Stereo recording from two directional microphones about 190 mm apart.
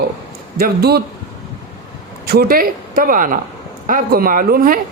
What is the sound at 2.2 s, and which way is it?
A man's voice, 55° right (ahead or behind).